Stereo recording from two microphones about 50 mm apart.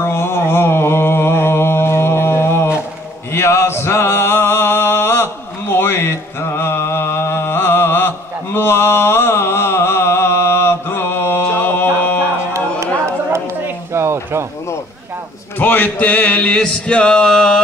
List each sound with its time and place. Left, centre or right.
0.0 s mantra: left
3.3 s a sound: left
11.4 s mantra: left
12.8 s chatter: right
13.9 s a sound: right
15.6 s music: left; by 17.6 s centre